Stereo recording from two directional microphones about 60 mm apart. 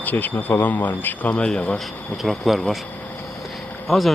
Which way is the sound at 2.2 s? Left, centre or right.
Centre.